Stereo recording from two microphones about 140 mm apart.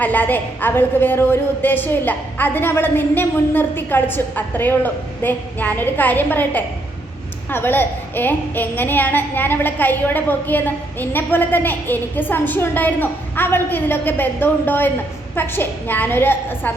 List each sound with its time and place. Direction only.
0.0 s a woman's voice: 10° left (ahead or behind)